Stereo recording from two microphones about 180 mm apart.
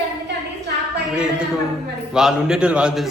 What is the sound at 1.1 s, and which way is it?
A man's voice, 5° right (ahead or behind).